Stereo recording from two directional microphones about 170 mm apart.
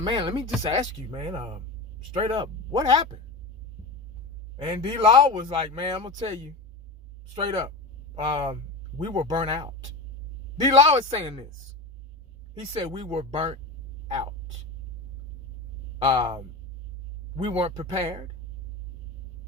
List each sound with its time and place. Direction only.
0.0 s speech: 30° right (ahead or behind)
4.5 s speech: 25° right (ahead or behind)
7.3 s speech: 30° right (ahead or behind)
10.8 s speech: 40° right (ahead or behind)
12.7 s speech: 30° right (ahead or behind)
16.0 s speech: 30° right (ahead or behind)